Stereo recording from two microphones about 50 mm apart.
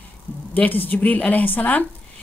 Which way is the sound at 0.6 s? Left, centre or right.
Left.